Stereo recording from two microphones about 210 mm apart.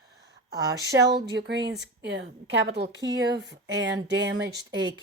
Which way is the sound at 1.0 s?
50° right (ahead or behind).